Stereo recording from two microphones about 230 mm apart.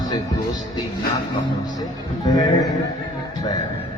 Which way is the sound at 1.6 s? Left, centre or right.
Centre.